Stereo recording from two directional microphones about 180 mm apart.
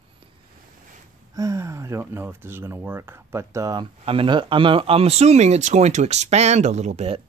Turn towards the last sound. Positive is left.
turn(degrees=-35)  # may be behind; listen again after turning